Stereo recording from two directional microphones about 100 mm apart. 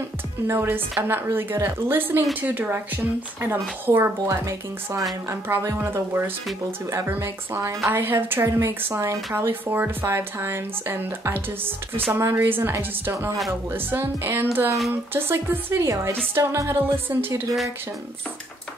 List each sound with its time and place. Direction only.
0.5 s speech: 25° right (ahead or behind)